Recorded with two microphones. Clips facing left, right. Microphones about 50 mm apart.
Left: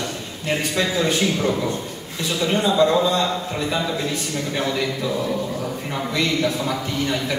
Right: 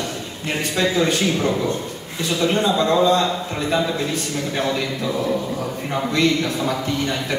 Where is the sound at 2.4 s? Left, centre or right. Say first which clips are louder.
Left 1 dB; centre.